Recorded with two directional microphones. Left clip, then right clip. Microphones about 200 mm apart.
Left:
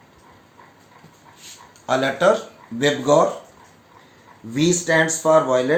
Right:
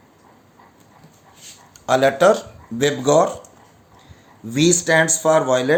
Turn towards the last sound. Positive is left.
turn(degrees=-55)  # may be behind; listen again after turning